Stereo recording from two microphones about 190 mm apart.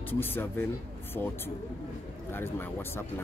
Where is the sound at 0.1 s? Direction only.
10° left (ahead or behind).